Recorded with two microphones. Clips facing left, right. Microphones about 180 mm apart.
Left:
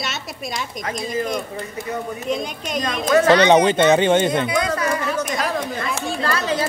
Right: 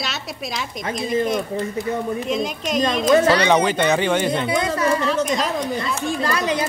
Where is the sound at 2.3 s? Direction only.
Centre (ahead or behind).